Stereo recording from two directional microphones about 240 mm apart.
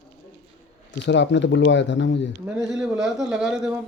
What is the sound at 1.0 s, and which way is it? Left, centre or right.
Speech, left.